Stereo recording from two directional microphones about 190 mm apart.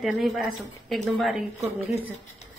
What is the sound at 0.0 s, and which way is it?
Speech, centre (ahead or behind).